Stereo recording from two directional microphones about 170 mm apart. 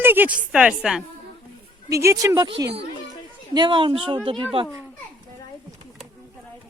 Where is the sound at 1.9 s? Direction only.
20° right (ahead or behind).